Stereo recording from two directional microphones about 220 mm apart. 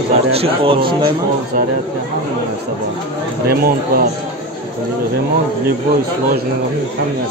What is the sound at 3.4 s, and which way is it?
Speech, 40° right (ahead or behind).